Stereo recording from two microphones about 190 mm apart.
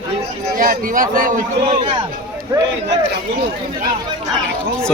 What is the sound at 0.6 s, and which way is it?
Speech, 50° right (ahead or behind).